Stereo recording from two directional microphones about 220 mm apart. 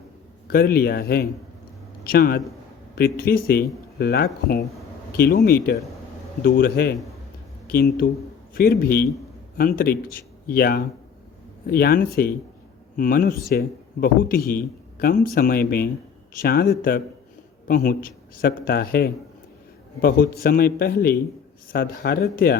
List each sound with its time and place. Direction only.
0.4 s a man's voice: 45° left (ahead or behind)